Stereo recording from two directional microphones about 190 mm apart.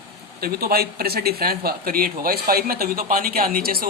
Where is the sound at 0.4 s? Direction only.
50° right (ahead or behind).